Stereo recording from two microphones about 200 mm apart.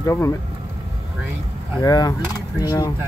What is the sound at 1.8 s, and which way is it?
Speech, 20° left (ahead or behind).